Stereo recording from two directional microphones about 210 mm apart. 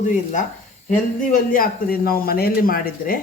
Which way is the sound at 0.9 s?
40° left (ahead or behind).